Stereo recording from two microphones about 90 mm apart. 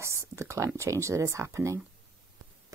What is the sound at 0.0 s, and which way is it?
A woman's voice, 30° right (ahead or behind).